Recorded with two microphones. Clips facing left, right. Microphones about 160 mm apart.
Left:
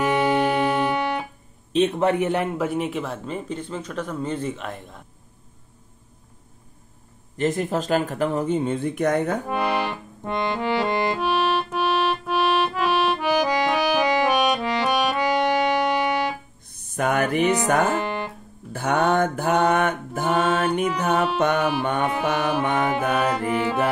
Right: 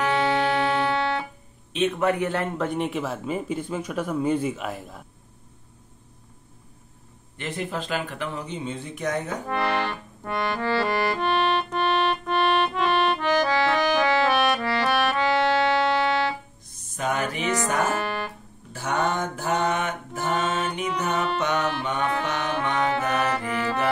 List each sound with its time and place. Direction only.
0.0 s organ: 15° left (ahead or behind)
1.7 s a man's voice: 35° left (ahead or behind); by 2.5 s 20° left (ahead or behind)
2.5 s speech: 5° left (ahead or behind)
7.3 s speech: 45° left (ahead or behind)
9.5 s accordion: 15° left (ahead or behind)
11.1 s music: 5° left (ahead or behind)
16.6 s music: 60° left (ahead or behind)
17.8 s music: 20° left (ahead or behind)
18.7 s mantra: 55° left (ahead or behind)
21.0 s speech: 50° left (ahead or behind)
22.2 s music: 50° left (ahead or behind)
23.3 s music: 15° left (ahead or behind)